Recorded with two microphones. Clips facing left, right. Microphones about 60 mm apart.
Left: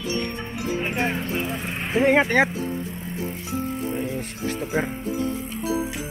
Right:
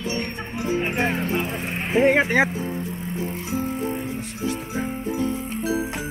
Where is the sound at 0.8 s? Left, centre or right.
Centre.